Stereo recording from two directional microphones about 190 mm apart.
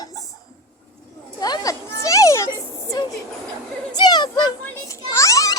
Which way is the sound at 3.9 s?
20° left (ahead or behind).